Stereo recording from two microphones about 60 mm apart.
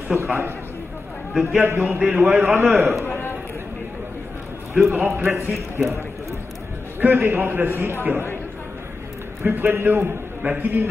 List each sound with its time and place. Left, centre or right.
0.1 s a man's voice: right
1.3 s a man's voice: centre
1.6 s a man's voice: right
2.0 s a man's voice: centre
2.4 s a man's voice: right
3.1 s a sound: left
4.7 s a man's voice: centre
5.0 s a man's voice: right
5.8 s a man's voice: centre
7.0 s a man's voice: right
9.4 s a man's voice: right